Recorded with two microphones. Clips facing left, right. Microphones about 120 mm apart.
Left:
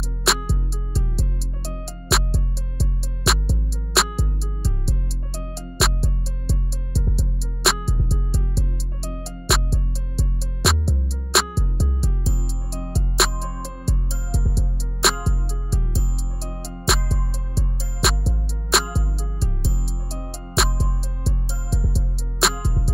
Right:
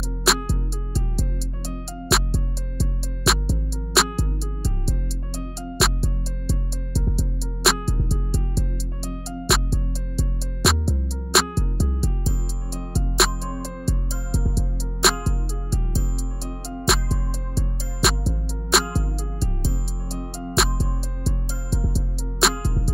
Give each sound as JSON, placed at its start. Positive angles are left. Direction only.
{"t": 0.2, "sound": "music", "side_deg": 0}